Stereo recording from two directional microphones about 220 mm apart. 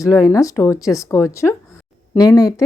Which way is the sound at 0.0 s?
15° left (ahead or behind).